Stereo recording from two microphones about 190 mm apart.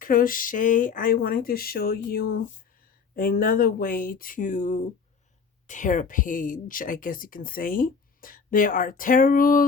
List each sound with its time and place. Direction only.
0.0 s speech: 45° left (ahead or behind)